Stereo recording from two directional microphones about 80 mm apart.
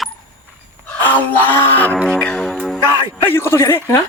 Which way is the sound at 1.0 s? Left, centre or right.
Left.